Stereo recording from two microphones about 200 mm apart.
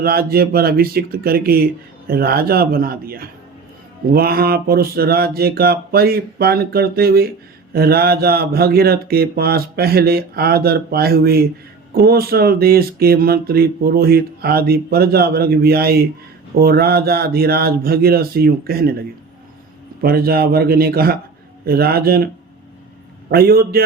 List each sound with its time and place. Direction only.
0.0 s speech: 50° right (ahead or behind)
23.3 s speech: 50° right (ahead or behind)